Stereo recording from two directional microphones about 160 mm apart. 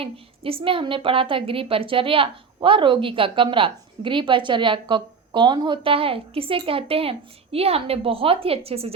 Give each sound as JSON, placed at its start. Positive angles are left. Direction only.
{"t": 0.0, "sound": "a woman's voice", "side_deg": -35}